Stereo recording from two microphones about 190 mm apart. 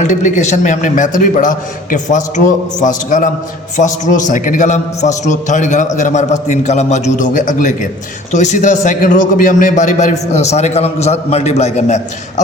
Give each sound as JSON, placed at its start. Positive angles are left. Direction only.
{"t": 0.0, "sound": "a man's voice", "side_deg": 40}